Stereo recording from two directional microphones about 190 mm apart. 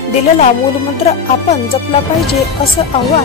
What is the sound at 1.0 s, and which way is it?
Music, 35° left (ahead or behind).